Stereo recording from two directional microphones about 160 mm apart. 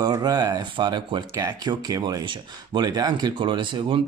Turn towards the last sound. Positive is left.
turn(degrees=-30)  # may be behind; listen again after turning